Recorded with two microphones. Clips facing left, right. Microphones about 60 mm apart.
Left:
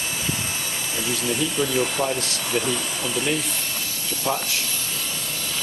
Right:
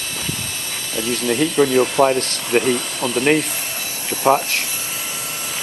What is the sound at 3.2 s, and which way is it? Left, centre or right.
Speech, right.